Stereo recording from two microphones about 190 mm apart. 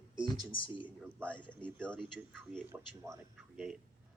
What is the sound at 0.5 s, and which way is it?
Speech, 25° left (ahead or behind).